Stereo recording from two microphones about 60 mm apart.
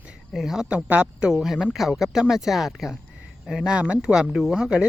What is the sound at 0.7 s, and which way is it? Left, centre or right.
Speech, right.